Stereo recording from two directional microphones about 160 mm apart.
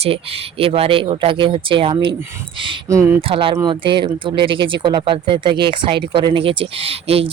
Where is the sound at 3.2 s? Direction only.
35° right (ahead or behind).